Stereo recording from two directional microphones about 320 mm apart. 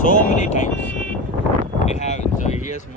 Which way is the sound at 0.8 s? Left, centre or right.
Centre.